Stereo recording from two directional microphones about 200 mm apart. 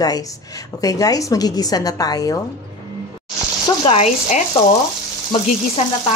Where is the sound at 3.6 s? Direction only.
30° left (ahead or behind).